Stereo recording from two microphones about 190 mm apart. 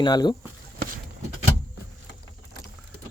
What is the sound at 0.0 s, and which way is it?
Speech, 20° left (ahead or behind).